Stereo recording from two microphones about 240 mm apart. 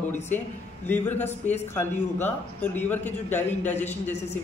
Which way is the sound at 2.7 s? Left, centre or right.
Centre.